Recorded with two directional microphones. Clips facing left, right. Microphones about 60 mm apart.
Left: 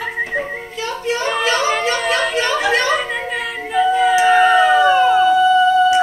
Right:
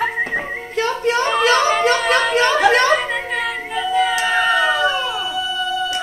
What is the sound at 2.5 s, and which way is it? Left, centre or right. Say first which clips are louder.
Chatter: right 3 dB; right.